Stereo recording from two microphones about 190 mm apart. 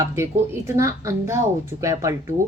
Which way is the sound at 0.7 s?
15° right (ahead or behind).